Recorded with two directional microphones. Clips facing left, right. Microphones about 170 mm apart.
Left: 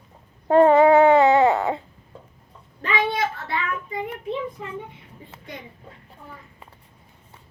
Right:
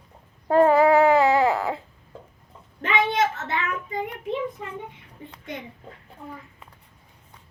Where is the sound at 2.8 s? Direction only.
20° right (ahead or behind).